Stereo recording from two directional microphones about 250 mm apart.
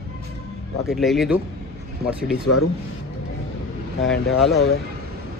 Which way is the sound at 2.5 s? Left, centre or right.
Left.